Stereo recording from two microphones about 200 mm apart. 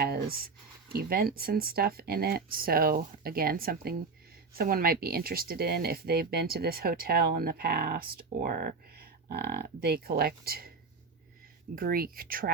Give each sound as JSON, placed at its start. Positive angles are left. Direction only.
{"t": 0.0, "sound": "speech", "side_deg": -50}
{"t": 11.7, "sound": "speech", "side_deg": -45}